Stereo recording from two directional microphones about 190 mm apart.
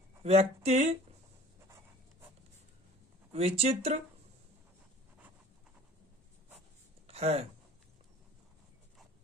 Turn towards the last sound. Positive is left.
turn(degrees=-35)  # may be behind; listen again after turning